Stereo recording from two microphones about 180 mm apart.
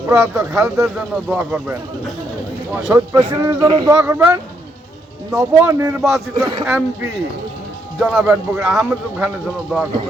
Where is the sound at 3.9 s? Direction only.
5° right (ahead or behind); by 6.7 s 25° right (ahead or behind).